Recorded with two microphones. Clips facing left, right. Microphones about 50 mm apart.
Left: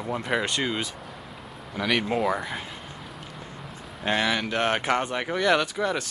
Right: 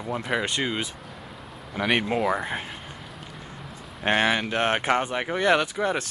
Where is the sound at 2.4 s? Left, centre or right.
Right.